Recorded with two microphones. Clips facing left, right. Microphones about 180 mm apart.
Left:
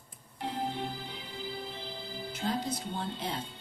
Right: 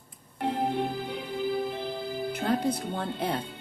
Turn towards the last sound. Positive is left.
turn(degrees=-55)  # may be behind; listen again after turning